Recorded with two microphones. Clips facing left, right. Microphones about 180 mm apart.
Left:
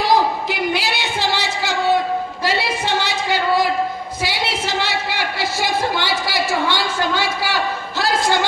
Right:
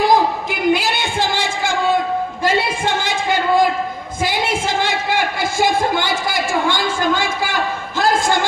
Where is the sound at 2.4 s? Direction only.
50° right (ahead or behind).